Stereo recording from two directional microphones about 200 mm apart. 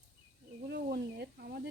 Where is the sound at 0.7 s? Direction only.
55° right (ahead or behind).